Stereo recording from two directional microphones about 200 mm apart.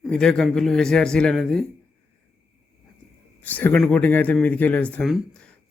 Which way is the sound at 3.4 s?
10° left (ahead or behind).